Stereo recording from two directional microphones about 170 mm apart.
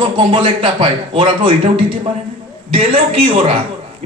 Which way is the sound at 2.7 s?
35° right (ahead or behind).